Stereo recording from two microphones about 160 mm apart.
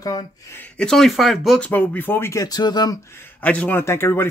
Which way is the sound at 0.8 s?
5° left (ahead or behind).